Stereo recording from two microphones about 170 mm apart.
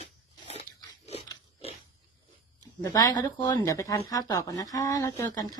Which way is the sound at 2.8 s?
20° left (ahead or behind).